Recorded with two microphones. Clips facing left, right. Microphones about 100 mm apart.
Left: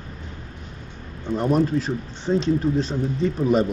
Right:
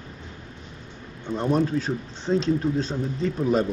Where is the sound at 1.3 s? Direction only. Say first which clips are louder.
Left 2 dB; 5° left (ahead or behind).